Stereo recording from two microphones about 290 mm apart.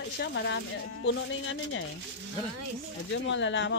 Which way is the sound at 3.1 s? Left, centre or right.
Left.